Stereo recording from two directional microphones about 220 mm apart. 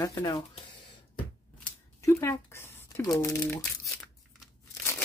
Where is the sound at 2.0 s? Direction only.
15° left (ahead or behind).